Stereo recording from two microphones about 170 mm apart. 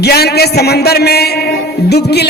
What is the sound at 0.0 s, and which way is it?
A man's voice, 70° left (ahead or behind).